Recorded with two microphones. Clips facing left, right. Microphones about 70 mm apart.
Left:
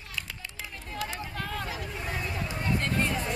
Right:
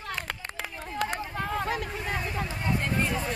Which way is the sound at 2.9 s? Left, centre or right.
Centre.